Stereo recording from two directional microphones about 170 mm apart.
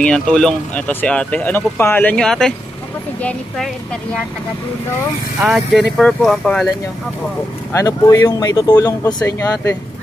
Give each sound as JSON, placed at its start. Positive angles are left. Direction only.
{"t": 0.0, "sound": "speech", "side_deg": 5}
{"t": 5.4, "sound": "speech", "side_deg": 0}
{"t": 7.7, "sound": "speech", "side_deg": 20}